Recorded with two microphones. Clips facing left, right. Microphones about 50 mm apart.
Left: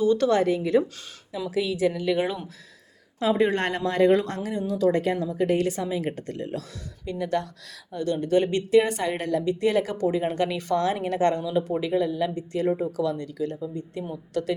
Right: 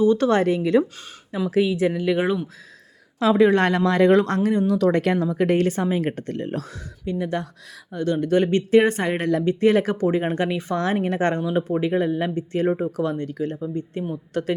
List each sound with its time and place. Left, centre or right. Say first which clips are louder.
0.0 s speech: right 3 dB; right
0.3 s speech: right 3 dB; right
1.6 s speech: right 3 dB; right
3.2 s speech: right 6 dB; right
7.0 s speech: right 1 dB; right
7.9 s speech: right 3 dB; right
10.8 s speech: right 1 dB; right